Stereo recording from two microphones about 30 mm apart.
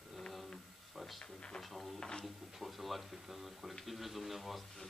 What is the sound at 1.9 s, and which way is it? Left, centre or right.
Speech, left.